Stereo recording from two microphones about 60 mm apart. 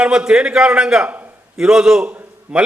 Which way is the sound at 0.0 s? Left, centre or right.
Centre.